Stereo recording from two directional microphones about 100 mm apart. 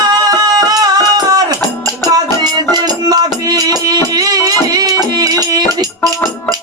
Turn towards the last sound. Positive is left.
turn(degrees=-40)  # may be behind; listen again after turning